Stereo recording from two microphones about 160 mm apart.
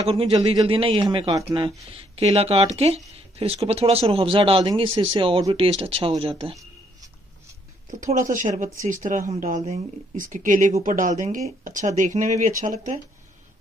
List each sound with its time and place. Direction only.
0.0 s speech: 35° right (ahead or behind)
7.9 s speech: 55° right (ahead or behind)